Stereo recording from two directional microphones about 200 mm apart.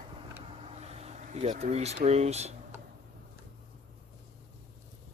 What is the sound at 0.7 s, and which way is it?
Speech, 35° right (ahead or behind).